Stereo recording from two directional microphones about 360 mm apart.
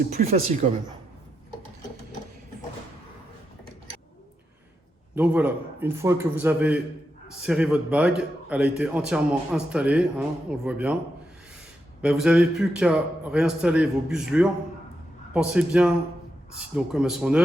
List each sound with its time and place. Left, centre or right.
0.1 s speech: centre
5.1 s a man's voice: centre
12.0 s a man's voice: centre